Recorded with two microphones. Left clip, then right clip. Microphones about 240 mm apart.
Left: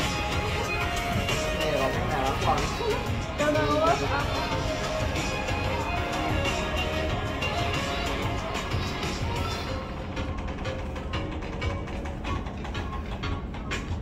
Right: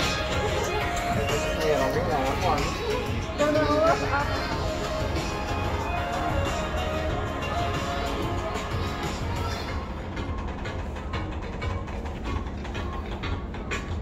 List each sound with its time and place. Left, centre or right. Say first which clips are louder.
0.0 s music: right 2 dB; left
1.0 s music: right 2 dB; left
2.0 s speech: right 1 dB; left
7.3 s music: even; left